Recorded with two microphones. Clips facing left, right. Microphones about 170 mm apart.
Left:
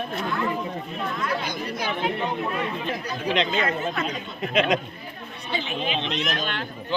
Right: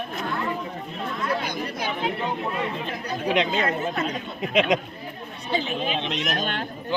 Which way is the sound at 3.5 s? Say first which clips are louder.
Right 1 dB; 40° right (ahead or behind).